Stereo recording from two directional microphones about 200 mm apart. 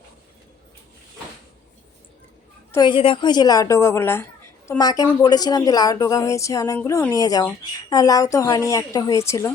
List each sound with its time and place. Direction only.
2.7 s a woman's voice: 25° left (ahead or behind)